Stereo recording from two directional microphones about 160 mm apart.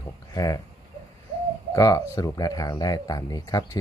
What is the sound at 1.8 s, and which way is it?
Speech, 20° left (ahead or behind).